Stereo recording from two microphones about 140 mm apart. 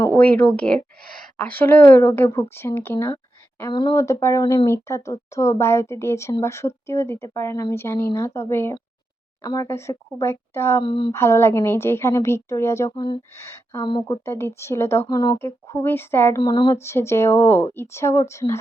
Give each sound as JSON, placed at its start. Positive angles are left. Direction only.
{"t": 0.0, "sound": "speech", "side_deg": 10}
{"t": 1.0, "sound": "a woman's voice", "side_deg": -90}
{"t": 1.4, "sound": "speech", "side_deg": 10}
{"t": 3.7, "sound": "speech", "side_deg": 35}
{"t": 3.9, "sound": "speech", "side_deg": 20}
{"t": 10.8, "sound": "speech", "side_deg": 35}
{"t": 11.1, "sound": "speech", "side_deg": 20}
{"t": 13.8, "sound": "speech", "side_deg": 30}
{"t": 14.3, "sound": "speech", "side_deg": 20}
{"t": 16.4, "sound": "speech", "side_deg": 30}
{"t": 16.7, "sound": "speech", "side_deg": 20}